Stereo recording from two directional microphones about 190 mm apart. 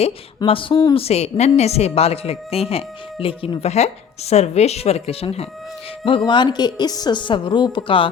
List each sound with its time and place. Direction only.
0.3 s a woman's voice: 30° left (ahead or behind)